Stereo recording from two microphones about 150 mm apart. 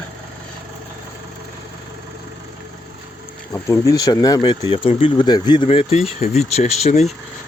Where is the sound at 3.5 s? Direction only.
20° left (ahead or behind).